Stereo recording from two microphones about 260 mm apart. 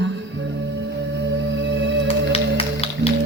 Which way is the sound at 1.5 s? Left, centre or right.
Right.